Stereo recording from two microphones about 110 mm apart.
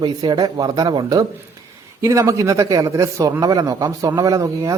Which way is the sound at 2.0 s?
30° right (ahead or behind).